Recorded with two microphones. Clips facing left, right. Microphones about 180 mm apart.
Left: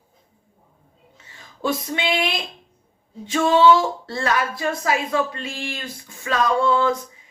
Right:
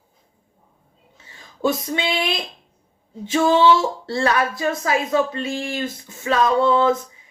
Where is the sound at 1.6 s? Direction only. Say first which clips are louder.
Right 3 dB; 25° right (ahead or behind).